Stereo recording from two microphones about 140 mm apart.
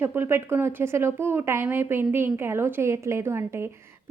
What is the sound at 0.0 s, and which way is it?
A woman's voice, 15° right (ahead or behind).